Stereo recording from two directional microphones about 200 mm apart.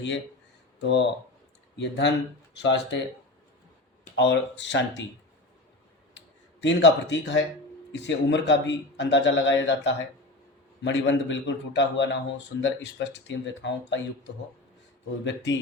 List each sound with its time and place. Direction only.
0.8 s a man's voice: 60° left (ahead or behind)
4.1 s a man's voice: 65° left (ahead or behind)
6.1 s a man's voice: 65° left (ahead or behind)